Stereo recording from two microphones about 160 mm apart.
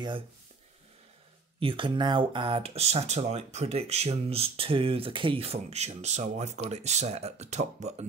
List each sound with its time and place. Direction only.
1.6 s speech: 30° right (ahead or behind)